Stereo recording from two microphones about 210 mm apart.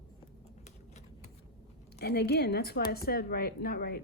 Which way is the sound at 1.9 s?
50° left (ahead or behind).